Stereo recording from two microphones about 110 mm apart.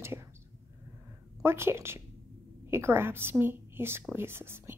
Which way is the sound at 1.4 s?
25° right (ahead or behind).